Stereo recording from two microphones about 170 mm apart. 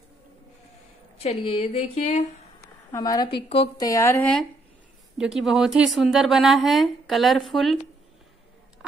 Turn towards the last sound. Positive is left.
turn(degrees=0)  # may be behind; listen again after turning